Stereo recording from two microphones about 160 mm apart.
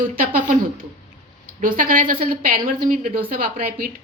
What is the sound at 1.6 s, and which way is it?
A woman's voice, 60° right (ahead or behind).